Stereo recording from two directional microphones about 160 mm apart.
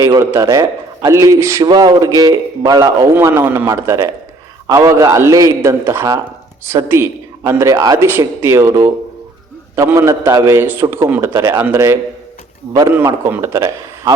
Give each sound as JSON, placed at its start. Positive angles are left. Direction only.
{"t": 0.0, "sound": "a man's voice", "side_deg": -20}